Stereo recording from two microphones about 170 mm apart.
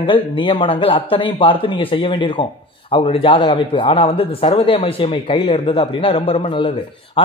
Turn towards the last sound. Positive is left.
turn(degrees=30)  # may be behind; listen again after turning